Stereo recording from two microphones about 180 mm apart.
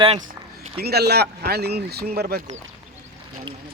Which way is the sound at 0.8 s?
60° right (ahead or behind).